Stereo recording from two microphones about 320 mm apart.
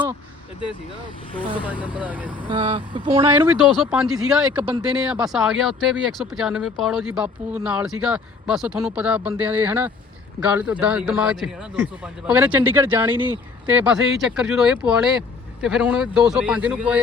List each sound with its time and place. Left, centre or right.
1.4 s a man's voice: centre
2.4 s speech: centre
3.3 s a man's voice: centre